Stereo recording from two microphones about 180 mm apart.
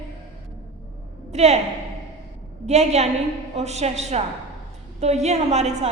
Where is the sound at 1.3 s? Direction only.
40° right (ahead or behind).